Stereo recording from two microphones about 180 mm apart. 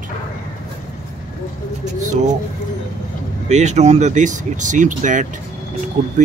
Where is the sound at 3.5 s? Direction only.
40° right (ahead or behind).